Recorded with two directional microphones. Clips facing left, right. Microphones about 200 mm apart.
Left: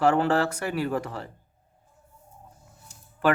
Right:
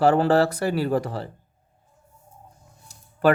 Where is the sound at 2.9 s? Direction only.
40° right (ahead or behind).